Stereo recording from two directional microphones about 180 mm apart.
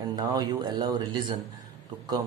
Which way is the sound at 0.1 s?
25° right (ahead or behind).